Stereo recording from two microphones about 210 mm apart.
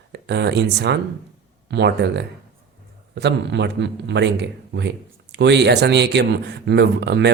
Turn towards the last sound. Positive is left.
turn(degrees=-55)  # may be behind; listen again after turning